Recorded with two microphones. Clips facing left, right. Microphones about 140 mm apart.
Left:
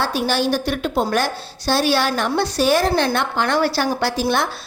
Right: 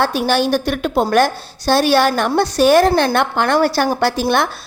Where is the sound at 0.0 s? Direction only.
55° right (ahead or behind).